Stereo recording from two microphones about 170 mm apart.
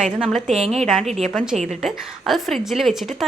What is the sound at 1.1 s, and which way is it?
Speech, 40° right (ahead or behind).